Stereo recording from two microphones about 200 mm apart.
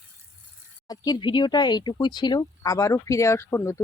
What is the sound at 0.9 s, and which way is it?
Speech, 20° left (ahead or behind).